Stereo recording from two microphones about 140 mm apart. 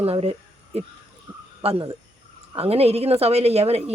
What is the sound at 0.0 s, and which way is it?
Speech, 45° right (ahead or behind).